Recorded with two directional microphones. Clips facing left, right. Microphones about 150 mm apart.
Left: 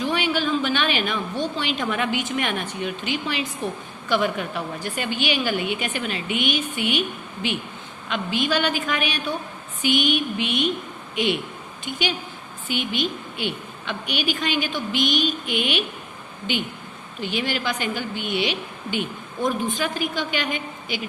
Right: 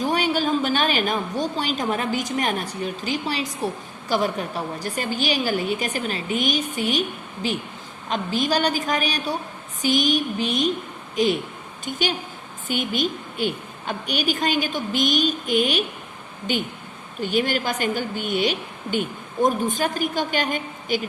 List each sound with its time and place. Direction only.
0.0 s a woman's voice: 40° right (ahead or behind)